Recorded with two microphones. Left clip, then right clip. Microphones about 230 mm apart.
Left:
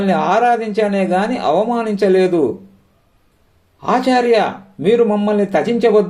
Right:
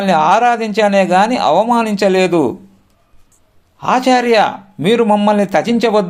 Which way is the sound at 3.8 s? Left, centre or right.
Right.